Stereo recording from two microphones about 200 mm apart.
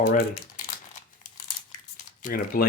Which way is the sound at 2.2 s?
40° left (ahead or behind).